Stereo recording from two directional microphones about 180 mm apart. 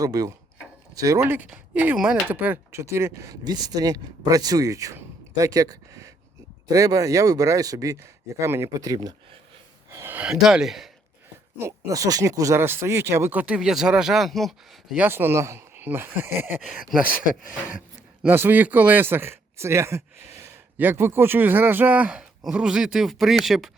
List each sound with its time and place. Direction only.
0.0 s speech: 20° right (ahead or behind); by 10.8 s centre (ahead or behind)
11.6 s speech: 20° right (ahead or behind); by 14.5 s centre (ahead or behind)
14.9 s speech: 10° right (ahead or behind)